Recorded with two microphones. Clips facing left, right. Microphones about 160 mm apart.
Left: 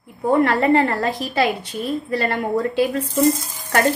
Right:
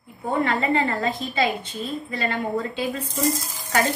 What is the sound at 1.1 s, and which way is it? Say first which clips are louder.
A woman's voice: left 4 dB; 75° left (ahead or behind).